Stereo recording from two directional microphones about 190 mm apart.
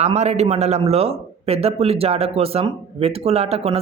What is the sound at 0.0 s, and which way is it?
Speech, 35° right (ahead or behind).